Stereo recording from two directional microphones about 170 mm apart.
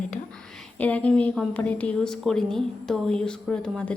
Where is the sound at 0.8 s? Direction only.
10° left (ahead or behind).